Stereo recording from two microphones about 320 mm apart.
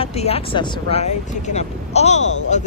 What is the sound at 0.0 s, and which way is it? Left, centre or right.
Speech, centre.